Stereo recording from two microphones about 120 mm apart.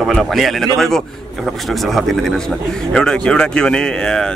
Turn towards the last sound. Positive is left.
turn(degrees=5)  # may be behind; listen again after turning